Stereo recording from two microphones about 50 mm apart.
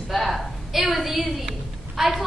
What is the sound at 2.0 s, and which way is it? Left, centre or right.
Speech, centre.